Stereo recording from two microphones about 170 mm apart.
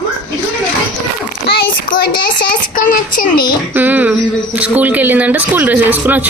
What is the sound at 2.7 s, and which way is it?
Speech, 55° left (ahead or behind).